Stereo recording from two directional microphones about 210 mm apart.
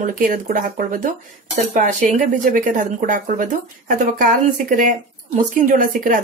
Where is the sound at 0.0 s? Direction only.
40° right (ahead or behind).